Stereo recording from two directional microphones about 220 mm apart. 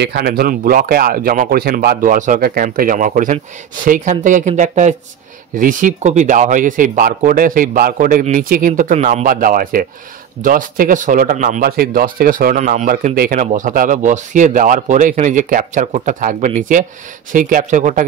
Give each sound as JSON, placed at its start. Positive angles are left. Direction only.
{"t": 0.0, "sound": "speech", "side_deg": -45}